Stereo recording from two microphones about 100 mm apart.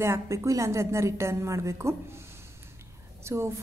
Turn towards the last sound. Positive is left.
turn(degrees=-25)  # may be behind; listen again after turning